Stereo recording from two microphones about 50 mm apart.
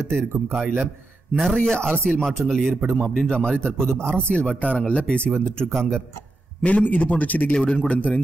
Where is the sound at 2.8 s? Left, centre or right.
Right.